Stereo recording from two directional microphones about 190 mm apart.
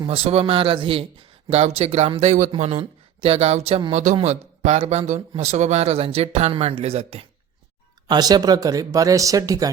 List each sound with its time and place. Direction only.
0.1 s speech: 30° right (ahead or behind)
8.0 s speech: 20° right (ahead or behind)